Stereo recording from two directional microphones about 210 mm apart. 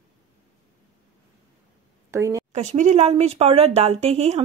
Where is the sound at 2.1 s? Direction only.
15° right (ahead or behind).